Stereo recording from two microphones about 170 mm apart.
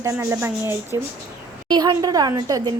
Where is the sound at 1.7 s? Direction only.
25° right (ahead or behind).